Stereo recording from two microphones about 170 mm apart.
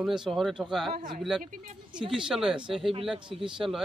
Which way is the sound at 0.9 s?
40° right (ahead or behind).